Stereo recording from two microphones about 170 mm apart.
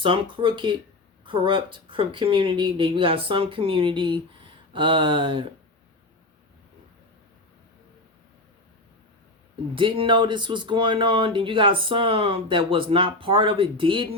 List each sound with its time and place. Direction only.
0.0 s speech: 30° right (ahead or behind)
9.7 s speech: 30° right (ahead or behind)